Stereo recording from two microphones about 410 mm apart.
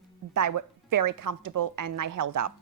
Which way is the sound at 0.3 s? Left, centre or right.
Right.